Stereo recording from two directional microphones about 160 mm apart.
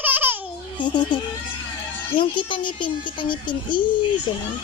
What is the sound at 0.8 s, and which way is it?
A child's voice, 30° left (ahead or behind).